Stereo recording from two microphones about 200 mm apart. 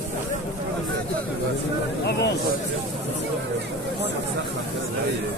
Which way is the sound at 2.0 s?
60° left (ahead or behind).